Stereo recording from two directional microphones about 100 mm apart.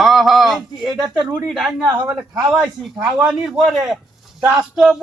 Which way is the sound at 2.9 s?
10° right (ahead or behind).